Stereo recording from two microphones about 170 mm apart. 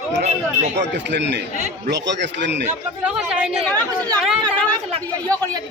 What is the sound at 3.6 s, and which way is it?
Speech, 10° left (ahead or behind).